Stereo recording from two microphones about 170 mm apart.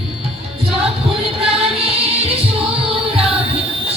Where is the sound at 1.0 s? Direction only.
35° right (ahead or behind).